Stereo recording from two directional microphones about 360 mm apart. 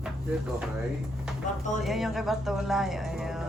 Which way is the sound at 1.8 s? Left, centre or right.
Centre.